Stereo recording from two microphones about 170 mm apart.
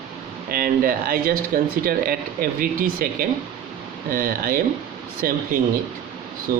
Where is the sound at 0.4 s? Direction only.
60° right (ahead or behind).